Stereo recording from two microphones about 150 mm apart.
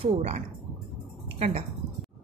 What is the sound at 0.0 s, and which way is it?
Speech, 50° right (ahead or behind).